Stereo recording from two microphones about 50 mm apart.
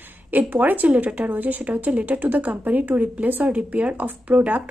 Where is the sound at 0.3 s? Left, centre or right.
Right.